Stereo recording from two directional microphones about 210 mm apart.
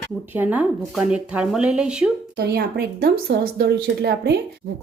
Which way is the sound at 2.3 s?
50° right (ahead or behind).